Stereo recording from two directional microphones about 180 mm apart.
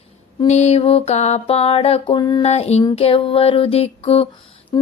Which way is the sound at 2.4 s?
35° left (ahead or behind).